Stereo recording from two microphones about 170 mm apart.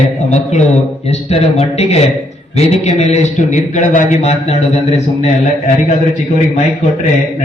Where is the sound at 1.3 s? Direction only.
40° left (ahead or behind).